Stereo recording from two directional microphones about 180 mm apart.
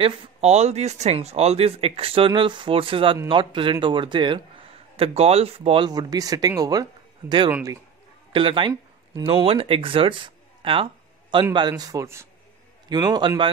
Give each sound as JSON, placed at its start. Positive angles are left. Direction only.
{"t": 0.0, "sound": "a man's voice", "side_deg": -35}
{"t": 8.3, "sound": "speech", "side_deg": -30}